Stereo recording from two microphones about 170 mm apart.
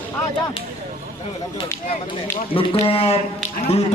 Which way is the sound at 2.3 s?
30° left (ahead or behind).